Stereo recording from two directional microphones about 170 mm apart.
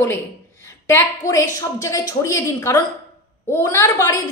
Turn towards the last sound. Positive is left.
turn(degrees=15)  # may be behind; listen again after turning